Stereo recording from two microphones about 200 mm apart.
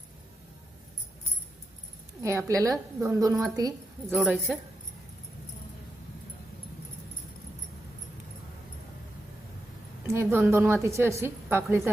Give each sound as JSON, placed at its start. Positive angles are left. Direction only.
{"t": 2.2, "sound": "a woman's voice", "side_deg": -15}
{"t": 4.2, "sound": "speech", "side_deg": 0}
{"t": 10.1, "sound": "a woman's voice", "side_deg": -10}